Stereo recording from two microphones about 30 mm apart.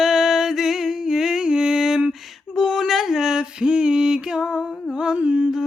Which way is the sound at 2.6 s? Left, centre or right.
Centre.